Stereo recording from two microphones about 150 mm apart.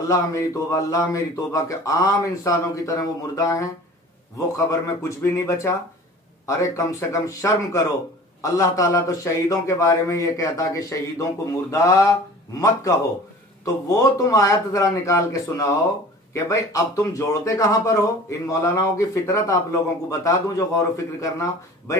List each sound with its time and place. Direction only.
0.1 s a man's voice: 20° left (ahead or behind)